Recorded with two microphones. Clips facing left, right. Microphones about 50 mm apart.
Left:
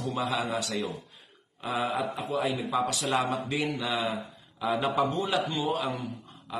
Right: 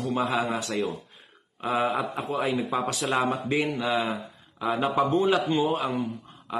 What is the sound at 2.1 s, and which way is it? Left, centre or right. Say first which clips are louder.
Speech: right 2 dB; right.